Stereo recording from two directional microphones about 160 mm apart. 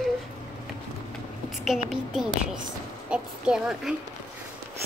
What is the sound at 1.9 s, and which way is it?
Speech, 5° right (ahead or behind).